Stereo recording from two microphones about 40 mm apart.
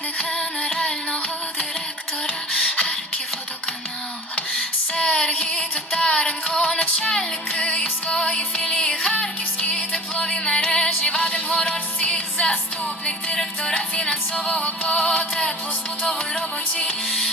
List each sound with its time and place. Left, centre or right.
0.2 s music: left
2.5 s beatboxing: left
4.4 s a sound: left
7.0 s music: centre